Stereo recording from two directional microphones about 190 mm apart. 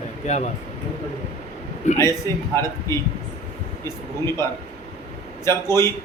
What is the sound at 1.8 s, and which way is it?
Speech, 40° left (ahead or behind).